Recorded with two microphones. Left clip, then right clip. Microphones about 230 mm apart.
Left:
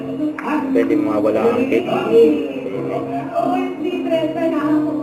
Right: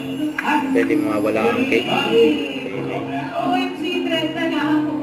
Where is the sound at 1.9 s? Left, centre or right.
Right.